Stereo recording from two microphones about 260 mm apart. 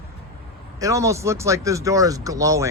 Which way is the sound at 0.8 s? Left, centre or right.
Centre.